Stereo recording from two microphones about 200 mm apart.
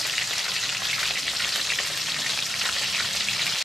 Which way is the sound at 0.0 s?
Centre (ahead or behind).